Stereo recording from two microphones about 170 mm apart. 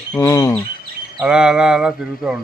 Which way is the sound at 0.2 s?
20° left (ahead or behind).